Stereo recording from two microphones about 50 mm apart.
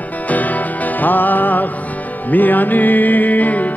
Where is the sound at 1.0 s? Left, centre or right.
Left.